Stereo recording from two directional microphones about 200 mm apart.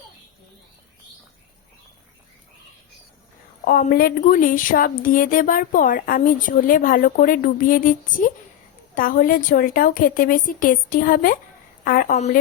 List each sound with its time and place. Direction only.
3.7 s a woman's voice: 50° left (ahead or behind)